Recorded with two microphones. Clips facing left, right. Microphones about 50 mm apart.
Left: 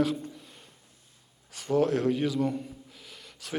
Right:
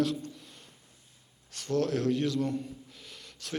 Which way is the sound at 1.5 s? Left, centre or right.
Centre.